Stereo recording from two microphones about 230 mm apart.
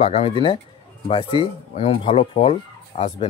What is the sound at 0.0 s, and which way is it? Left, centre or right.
Speech, left.